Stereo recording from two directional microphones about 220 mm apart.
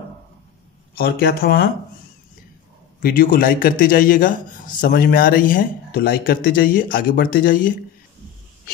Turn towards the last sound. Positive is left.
turn(degrees=40)  # may be behind; listen again after turning